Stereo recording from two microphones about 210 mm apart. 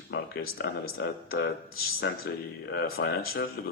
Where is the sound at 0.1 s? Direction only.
55° left (ahead or behind).